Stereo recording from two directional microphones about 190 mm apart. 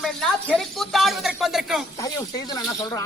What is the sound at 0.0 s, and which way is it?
Speech, centre (ahead or behind).